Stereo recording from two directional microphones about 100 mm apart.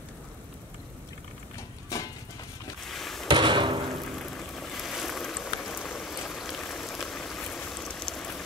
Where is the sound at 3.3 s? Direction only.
55° right (ahead or behind).